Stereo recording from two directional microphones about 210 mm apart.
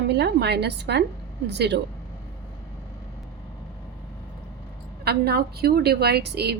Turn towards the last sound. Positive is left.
turn(degrees=-50)  # may be behind; listen again after turning